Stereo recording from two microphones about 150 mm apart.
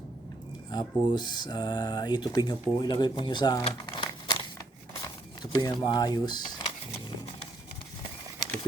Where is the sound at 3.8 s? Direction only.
30° left (ahead or behind).